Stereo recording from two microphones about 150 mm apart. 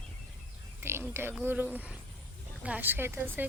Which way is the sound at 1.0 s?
15° right (ahead or behind).